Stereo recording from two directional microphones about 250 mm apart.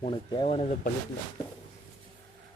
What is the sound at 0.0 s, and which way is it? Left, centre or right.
Speech, left.